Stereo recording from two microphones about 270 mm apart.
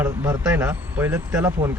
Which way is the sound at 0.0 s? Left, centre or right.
Centre.